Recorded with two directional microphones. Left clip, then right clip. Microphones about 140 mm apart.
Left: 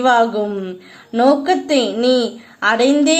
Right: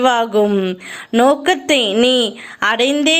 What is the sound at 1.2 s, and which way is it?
A woman's voice, 30° right (ahead or behind).